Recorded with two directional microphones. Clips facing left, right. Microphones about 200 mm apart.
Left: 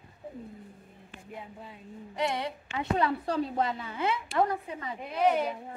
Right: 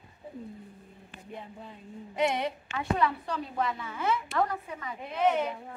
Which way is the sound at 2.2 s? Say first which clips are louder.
Right 3 dB; 20° right (ahead or behind).